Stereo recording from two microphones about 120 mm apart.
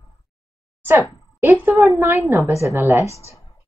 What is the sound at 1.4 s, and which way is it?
A woman's voice, 15° right (ahead or behind).